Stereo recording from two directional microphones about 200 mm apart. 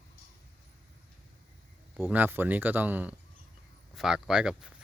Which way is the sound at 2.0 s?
10° right (ahead or behind).